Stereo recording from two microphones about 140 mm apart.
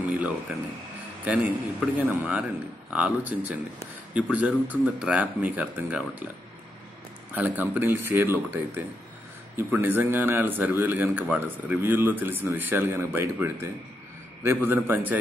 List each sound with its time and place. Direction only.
0.5 s a man's voice: 10° right (ahead or behind)
7.3 s a man's voice: 10° right (ahead or behind)